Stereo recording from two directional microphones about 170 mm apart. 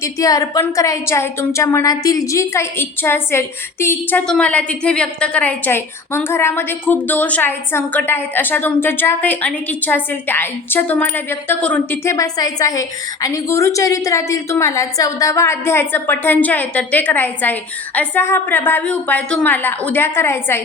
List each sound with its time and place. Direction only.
0.0 s a woman's voice: 20° left (ahead or behind)